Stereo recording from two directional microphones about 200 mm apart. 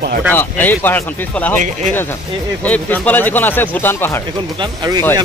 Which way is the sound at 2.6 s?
10° left (ahead or behind).